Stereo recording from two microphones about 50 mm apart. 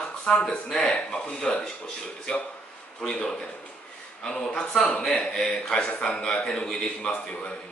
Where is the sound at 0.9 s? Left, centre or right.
Left.